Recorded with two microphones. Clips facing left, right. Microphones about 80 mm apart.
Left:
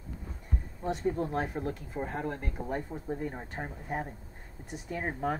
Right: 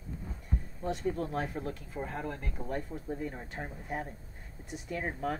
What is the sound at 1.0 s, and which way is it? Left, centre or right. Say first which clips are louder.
Speech: left 3 dB; centre.